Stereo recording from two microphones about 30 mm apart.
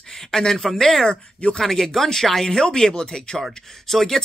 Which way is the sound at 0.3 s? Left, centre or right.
Centre.